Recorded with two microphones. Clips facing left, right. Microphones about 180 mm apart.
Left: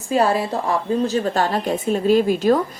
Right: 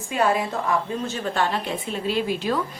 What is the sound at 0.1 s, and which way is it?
A woman's voice, 35° left (ahead or behind).